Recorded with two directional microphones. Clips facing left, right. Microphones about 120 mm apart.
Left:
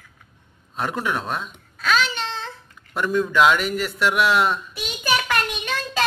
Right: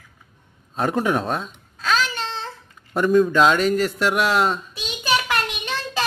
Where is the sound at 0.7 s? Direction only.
40° right (ahead or behind).